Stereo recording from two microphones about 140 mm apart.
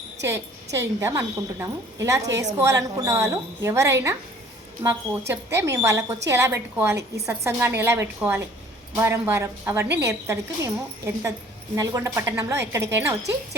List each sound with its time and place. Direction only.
0.3 s a woman's voice: 15° right (ahead or behind)